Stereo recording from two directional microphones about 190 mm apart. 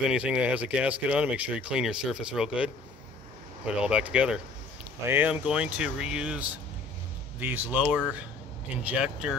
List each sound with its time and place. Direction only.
0.1 s speech: 5° right (ahead or behind)